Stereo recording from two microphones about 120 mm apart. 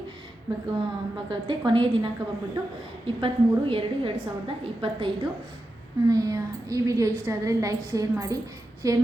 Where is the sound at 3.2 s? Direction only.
50° right (ahead or behind).